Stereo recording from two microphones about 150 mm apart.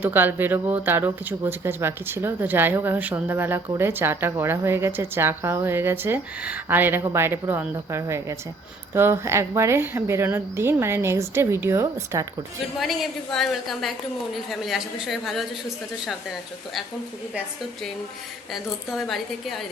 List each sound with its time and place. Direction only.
0.0 s a woman's voice: 15° right (ahead or behind)
12.8 s a woman's voice: centre (ahead or behind)
18.5 s a woman's voice: centre (ahead or behind)